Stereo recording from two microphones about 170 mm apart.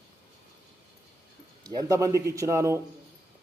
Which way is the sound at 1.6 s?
20° right (ahead or behind).